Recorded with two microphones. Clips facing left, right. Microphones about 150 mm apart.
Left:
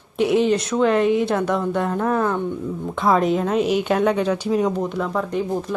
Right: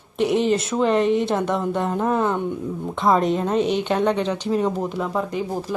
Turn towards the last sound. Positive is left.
turn(degrees=-5)  # may be behind; listen again after turning